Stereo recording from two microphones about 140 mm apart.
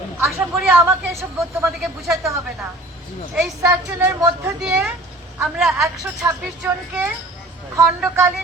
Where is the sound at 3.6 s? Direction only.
10° right (ahead or behind).